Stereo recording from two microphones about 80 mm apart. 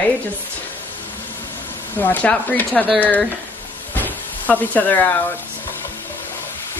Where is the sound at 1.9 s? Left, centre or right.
Left.